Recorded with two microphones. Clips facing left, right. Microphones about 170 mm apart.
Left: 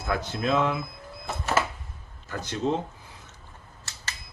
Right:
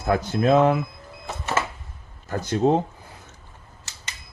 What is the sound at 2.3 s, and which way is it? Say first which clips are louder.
Speech: right 7 dB; 45° right (ahead or behind).